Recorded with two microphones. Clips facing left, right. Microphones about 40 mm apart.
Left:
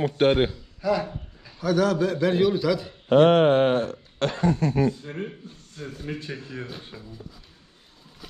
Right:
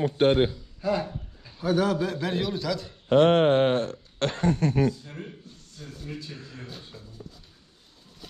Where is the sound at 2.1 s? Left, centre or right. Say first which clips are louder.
Left 7 dB; centre.